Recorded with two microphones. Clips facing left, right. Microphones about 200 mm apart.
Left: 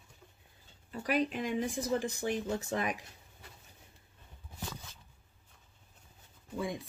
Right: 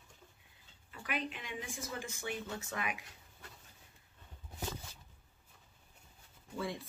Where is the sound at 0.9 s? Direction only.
40° left (ahead or behind).